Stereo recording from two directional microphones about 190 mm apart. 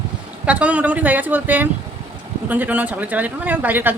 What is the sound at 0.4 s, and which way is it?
Speech, 5° right (ahead or behind).